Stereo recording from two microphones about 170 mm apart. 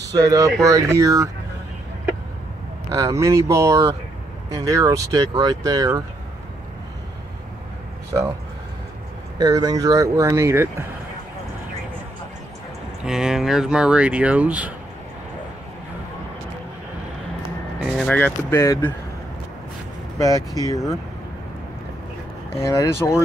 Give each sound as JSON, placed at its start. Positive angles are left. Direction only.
{"t": 0.1, "sound": "speech", "side_deg": -20}
{"t": 2.9, "sound": "speech", "side_deg": -20}
{"t": 9.4, "sound": "speech", "side_deg": -20}
{"t": 13.0, "sound": "speech", "side_deg": -5}
{"t": 17.9, "sound": "speech", "side_deg": 5}
{"t": 20.2, "sound": "speech", "side_deg": 20}
{"t": 22.6, "sound": "speech", "side_deg": 20}